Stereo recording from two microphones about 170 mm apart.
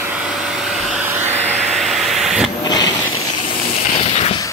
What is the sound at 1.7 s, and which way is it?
Vehicle, centre (ahead or behind).